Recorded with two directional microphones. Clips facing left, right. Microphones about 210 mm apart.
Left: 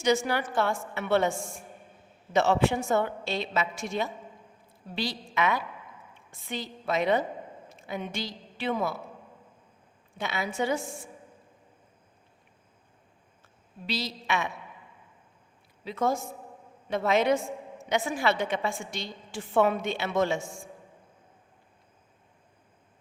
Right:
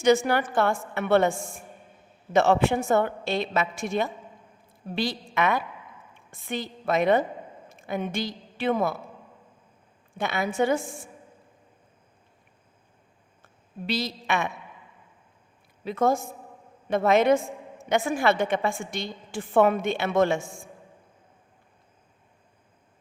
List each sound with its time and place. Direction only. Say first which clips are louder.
0.0 s a woman's voice: right 5 dB; 55° right (ahead or behind)
2.3 s a woman's voice: right 3 dB; 55° right (ahead or behind)
10.2 s a woman's voice: right 5 dB; 50° right (ahead or behind)
13.8 s a woman's voice: right 4 dB; 55° right (ahead or behind)
15.8 s a woman's voice: right 4 dB; 50° right (ahead or behind)